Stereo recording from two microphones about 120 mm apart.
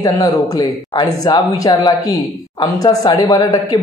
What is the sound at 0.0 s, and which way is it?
Speech, 30° left (ahead or behind).